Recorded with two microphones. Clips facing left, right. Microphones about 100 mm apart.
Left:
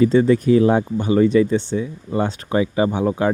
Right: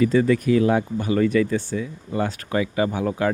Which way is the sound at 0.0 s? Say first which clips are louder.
Left 4 dB; 30° left (ahead or behind).